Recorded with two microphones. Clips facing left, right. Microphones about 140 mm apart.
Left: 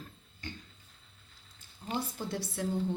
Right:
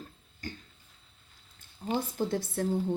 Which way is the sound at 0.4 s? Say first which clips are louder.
Right 3 dB; 45° right (ahead or behind).